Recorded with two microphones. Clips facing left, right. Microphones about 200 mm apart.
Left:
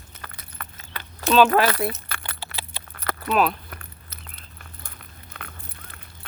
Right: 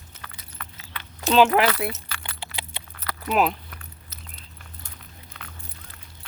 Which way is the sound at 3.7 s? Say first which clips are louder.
Left 3 dB; 60° left (ahead or behind).